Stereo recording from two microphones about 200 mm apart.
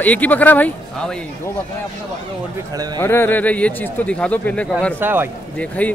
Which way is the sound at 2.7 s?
20° right (ahead or behind).